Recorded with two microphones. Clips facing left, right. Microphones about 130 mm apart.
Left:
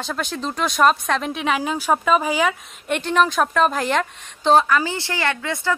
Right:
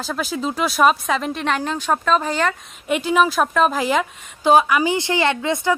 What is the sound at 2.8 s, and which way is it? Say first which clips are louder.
A woman's voice: right 2 dB; 5° right (ahead or behind).